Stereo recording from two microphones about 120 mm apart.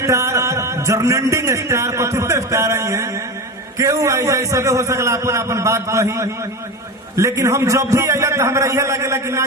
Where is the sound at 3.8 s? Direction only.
25° right (ahead or behind).